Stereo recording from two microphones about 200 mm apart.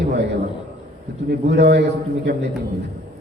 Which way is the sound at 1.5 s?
55° right (ahead or behind).